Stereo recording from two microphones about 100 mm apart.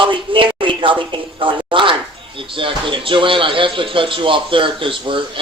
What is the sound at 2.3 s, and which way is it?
Speech, 60° right (ahead or behind).